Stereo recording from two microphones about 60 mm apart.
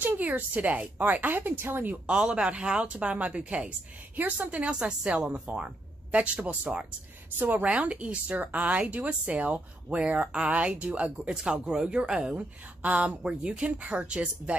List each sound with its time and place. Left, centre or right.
0.0 s a woman's voice: right
2.0 s a woman's voice: centre
12.4 s a woman's voice: right